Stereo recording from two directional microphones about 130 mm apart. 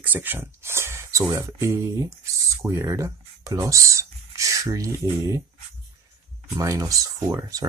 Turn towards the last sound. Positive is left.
turn(degrees=-25)  # may be behind; listen again after turning